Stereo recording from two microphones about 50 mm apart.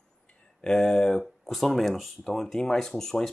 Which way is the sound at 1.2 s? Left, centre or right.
Centre.